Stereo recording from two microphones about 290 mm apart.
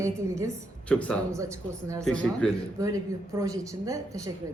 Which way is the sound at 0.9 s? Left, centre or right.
Centre.